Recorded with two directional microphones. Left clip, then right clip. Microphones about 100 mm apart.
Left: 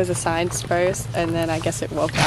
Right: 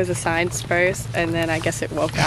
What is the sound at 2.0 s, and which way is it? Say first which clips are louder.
Speech: left 1 dB; 15° right (ahead or behind).